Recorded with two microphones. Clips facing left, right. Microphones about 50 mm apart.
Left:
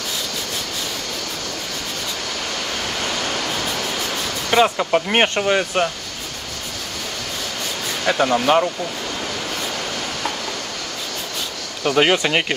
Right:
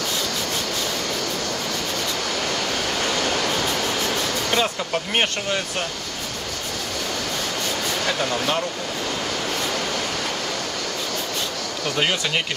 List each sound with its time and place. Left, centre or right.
4.5 s speech: centre
8.1 s speech: left
11.8 s speech: left